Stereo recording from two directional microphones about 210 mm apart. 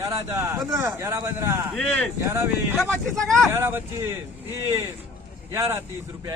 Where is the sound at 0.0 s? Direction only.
15° right (ahead or behind).